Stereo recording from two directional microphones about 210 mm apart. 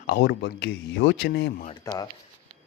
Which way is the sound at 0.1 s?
55° left (ahead or behind).